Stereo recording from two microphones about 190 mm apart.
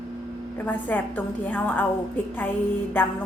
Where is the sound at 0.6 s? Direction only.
10° left (ahead or behind).